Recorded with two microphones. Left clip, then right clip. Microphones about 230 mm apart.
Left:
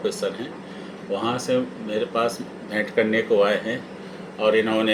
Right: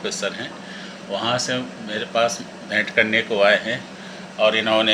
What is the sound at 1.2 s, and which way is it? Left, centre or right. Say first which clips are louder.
A man's voice: right 1 dB; right.